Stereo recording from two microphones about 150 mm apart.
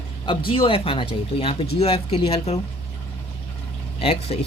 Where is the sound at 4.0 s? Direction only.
40° left (ahead or behind).